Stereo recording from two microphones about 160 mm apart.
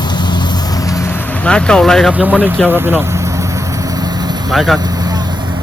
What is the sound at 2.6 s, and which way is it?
Vehicle, 15° right (ahead or behind).